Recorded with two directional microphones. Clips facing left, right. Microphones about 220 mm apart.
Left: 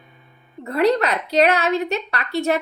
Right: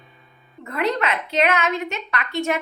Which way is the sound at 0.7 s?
35° left (ahead or behind).